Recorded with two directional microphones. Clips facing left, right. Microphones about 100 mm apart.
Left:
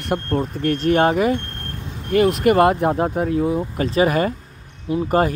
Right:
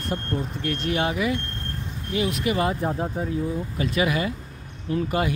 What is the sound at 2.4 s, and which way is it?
Speech, 55° left (ahead or behind).